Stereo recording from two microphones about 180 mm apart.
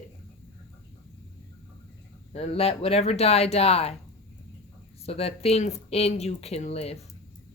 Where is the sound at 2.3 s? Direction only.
35° left (ahead or behind).